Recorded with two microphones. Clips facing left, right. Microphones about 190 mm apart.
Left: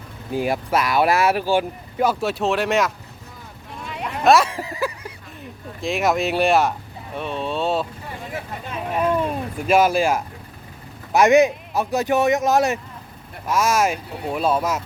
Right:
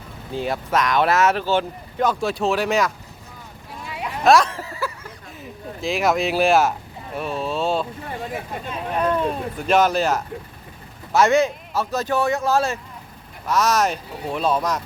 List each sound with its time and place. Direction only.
0.3 s speech: 10° left (ahead or behind)
3.8 s sheep: 5° right (ahead or behind)
4.5 s a sound: 15° left (ahead or behind)
5.4 s speech: centre (ahead or behind)
8.9 s speech: 10° left (ahead or behind)